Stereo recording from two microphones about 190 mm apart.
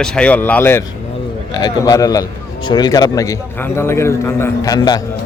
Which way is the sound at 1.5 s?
20° left (ahead or behind).